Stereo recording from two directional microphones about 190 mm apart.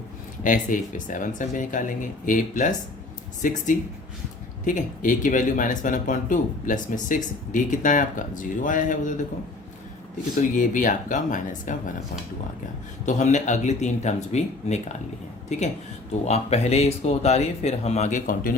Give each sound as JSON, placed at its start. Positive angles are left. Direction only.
{"t": 0.4, "sound": "speech", "side_deg": 45}
{"t": 4.6, "sound": "speech", "side_deg": 45}
{"t": 10.5, "sound": "speech", "side_deg": 45}
{"t": 13.1, "sound": "speech", "side_deg": 40}